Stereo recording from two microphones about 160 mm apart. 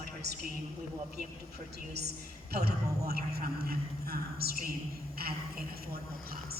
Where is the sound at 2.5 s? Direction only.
80° right.